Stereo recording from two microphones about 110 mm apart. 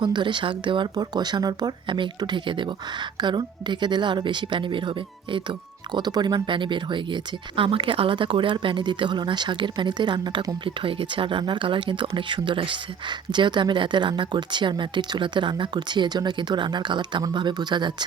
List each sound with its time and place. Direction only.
0.0 s speech: 45° right (ahead or behind)
1.9 s speech: 45° right (ahead or behind)